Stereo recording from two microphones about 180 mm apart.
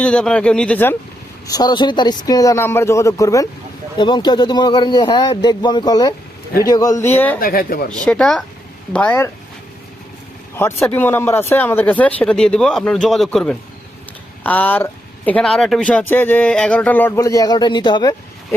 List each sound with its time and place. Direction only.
0.0 s speech: 5° left (ahead or behind)
1.5 s a man's voice: 20° left (ahead or behind)
7.3 s speech: 55° left (ahead or behind)
8.0 s speech: 5° left (ahead or behind)
10.5 s speech: 15° left (ahead or behind)